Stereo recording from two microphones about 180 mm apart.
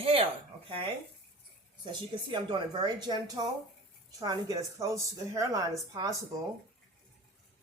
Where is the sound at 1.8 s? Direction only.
25° right (ahead or behind).